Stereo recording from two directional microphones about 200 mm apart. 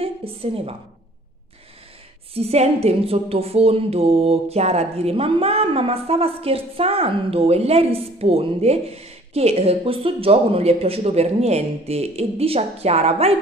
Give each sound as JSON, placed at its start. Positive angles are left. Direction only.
{"t": 0.0, "sound": "a woman's voice", "side_deg": -30}
{"t": 2.3, "sound": "a woman's voice", "side_deg": -30}